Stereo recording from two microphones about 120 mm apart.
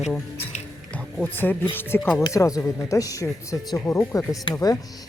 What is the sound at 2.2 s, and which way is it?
Speech, 30° left (ahead or behind).